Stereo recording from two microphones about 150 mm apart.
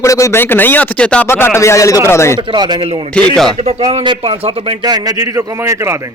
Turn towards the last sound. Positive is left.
turn(degrees=-15)  # may be behind; listen again after turning